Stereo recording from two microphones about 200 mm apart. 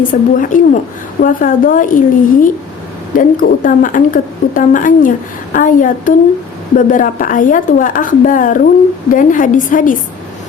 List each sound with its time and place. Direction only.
0.1 s a woman's voice: 40° left (ahead or behind)